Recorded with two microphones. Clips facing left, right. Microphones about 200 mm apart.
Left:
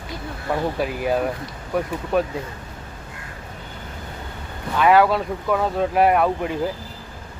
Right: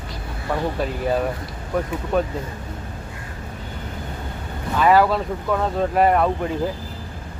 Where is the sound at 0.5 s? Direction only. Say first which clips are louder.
Even; 5° left (ahead or behind).